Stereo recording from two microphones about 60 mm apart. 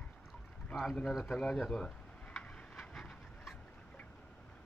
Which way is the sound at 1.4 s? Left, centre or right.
Centre.